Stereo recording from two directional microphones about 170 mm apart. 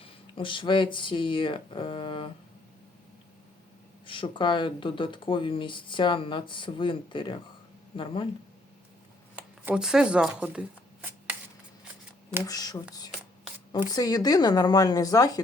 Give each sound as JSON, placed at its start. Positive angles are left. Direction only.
{"t": 0.0, "sound": "speech", "side_deg": 30}
{"t": 4.0, "sound": "speech", "side_deg": 30}
{"t": 9.6, "sound": "speech", "side_deg": -5}
{"t": 12.5, "sound": "speech", "side_deg": 20}
{"t": 13.8, "sound": "speech", "side_deg": 25}